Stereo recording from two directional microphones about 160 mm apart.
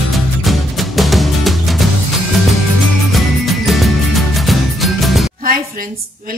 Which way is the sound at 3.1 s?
Centre (ahead or behind).